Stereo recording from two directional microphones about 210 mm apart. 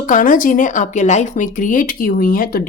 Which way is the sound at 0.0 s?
40° left (ahead or behind).